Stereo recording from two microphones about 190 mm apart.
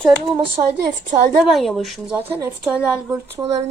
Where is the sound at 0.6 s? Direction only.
35° right (ahead or behind).